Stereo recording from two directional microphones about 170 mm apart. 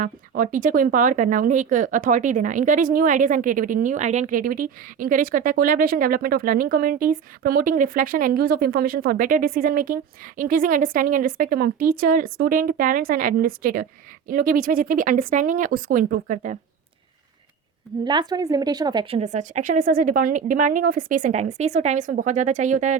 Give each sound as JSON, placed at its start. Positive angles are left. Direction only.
{"t": 0.0, "sound": "speech", "side_deg": -50}
{"t": 18.0, "sound": "a woman's voice", "side_deg": -25}